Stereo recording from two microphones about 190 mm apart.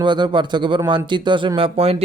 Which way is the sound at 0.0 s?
25° right (ahead or behind).